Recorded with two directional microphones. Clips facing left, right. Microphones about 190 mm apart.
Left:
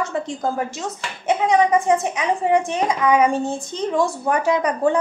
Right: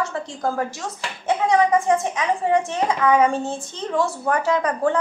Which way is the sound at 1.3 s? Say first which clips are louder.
Left 1 dB; 20° left (ahead or behind).